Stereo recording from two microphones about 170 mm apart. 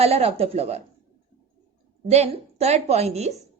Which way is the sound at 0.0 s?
35° right (ahead or behind).